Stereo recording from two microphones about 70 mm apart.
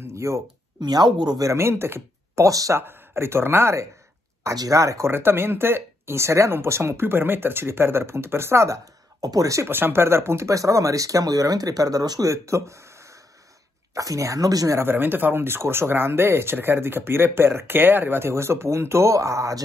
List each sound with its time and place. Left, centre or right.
0.0 s a sound: right
0.7 s speech: right
1.4 s speech: right
4.6 s speech: right
5.1 s speech: right
8.6 s speech: right
9.7 s speech: right
14.8 s speech: right